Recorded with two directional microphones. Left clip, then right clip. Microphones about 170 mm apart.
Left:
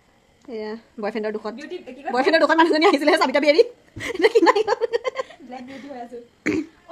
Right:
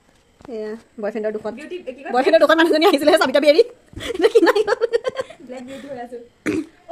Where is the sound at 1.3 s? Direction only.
15° left (ahead or behind).